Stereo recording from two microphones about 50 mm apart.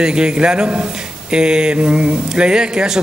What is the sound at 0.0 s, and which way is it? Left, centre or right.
A man's voice, centre.